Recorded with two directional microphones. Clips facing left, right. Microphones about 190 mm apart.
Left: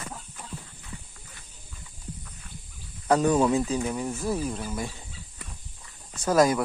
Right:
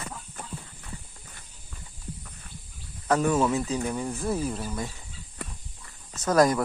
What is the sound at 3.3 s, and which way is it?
Speech, 15° left (ahead or behind).